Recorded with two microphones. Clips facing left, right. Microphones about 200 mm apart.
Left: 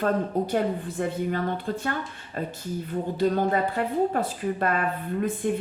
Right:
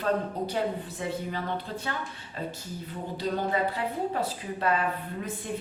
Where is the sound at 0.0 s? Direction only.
50° left (ahead or behind).